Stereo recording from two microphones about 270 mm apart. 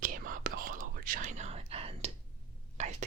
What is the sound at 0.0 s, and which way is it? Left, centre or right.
Whispering, right.